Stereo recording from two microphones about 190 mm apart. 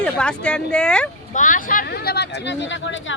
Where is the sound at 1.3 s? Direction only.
45° left (ahead or behind); by 3.2 s 80° left.